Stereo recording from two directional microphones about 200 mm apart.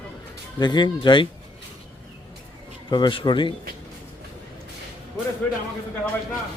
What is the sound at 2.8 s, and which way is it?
Speech, 20° left (ahead or behind).